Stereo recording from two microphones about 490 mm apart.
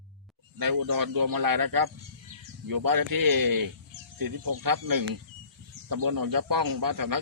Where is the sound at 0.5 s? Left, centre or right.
Right.